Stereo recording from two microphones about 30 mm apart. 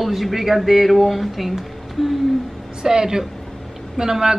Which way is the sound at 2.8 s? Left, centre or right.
Centre.